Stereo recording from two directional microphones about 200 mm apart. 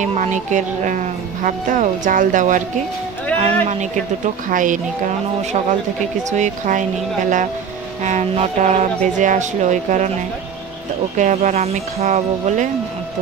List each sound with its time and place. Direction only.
0.0 s speech: 35° right (ahead or behind)
4.5 s speech: 40° right (ahead or behind)
11.1 s speech: 40° right (ahead or behind)